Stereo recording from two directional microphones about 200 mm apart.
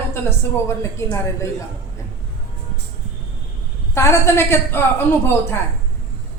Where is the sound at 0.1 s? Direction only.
10° left (ahead or behind).